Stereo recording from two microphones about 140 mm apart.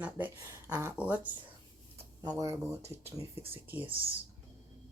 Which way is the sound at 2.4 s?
20° right (ahead or behind).